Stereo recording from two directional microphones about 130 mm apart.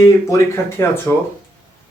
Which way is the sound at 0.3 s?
20° left (ahead or behind).